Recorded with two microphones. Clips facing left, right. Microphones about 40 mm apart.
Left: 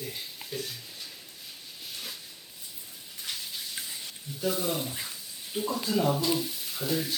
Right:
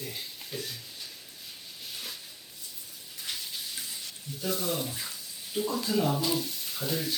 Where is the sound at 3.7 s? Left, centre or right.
Centre.